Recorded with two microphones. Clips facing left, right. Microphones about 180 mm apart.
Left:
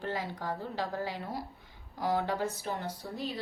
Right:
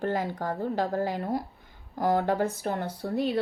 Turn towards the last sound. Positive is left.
turn(degrees=-65)  # may be behind; listen again after turning